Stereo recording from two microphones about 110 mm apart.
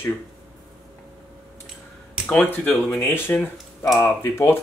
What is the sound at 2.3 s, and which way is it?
Speech, 15° left (ahead or behind).